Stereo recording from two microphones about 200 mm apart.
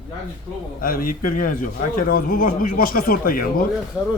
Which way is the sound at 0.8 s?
45° left (ahead or behind).